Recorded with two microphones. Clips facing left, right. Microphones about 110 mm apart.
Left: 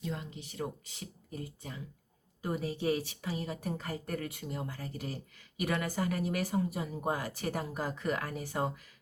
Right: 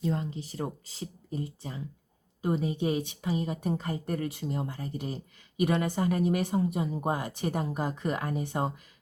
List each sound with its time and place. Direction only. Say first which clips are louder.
0.0 s a woman's voice: right 8 dB; 35° right (ahead or behind)